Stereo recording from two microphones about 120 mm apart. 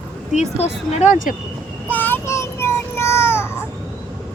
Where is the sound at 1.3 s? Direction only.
90° left.